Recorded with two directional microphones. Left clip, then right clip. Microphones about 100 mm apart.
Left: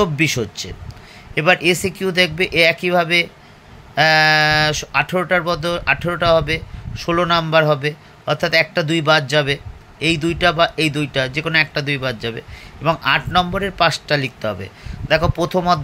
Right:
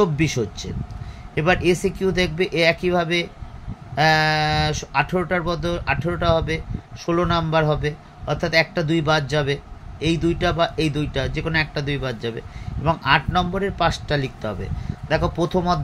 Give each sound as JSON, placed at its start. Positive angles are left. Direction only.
{"t": 0.0, "sound": "speech", "side_deg": 25}